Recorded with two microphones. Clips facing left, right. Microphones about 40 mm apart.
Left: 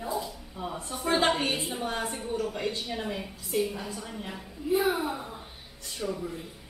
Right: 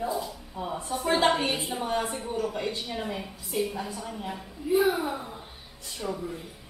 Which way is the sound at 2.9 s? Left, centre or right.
Centre.